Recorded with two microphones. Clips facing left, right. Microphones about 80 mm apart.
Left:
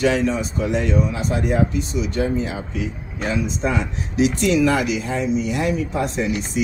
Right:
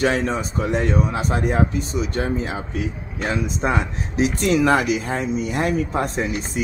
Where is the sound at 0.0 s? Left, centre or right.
Right.